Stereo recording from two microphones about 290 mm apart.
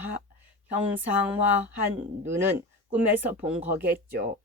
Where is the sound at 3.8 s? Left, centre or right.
Right.